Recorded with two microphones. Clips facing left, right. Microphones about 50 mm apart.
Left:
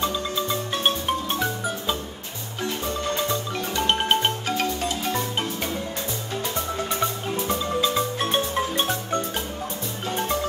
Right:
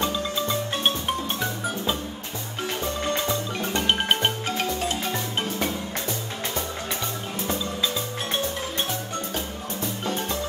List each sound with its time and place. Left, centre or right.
0.0 s marimba: centre
3.8 s music: centre